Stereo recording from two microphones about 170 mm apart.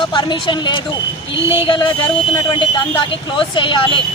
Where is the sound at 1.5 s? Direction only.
30° left (ahead or behind).